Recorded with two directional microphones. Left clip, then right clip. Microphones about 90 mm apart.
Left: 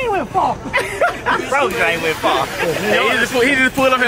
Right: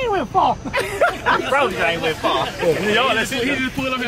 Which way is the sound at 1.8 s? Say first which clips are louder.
Left 3 dB; 25° left (ahead or behind).